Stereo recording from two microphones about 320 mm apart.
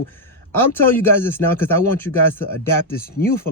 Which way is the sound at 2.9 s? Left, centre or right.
Left.